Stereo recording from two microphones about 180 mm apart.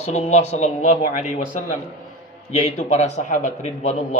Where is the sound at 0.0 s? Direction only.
35° left (ahead or behind).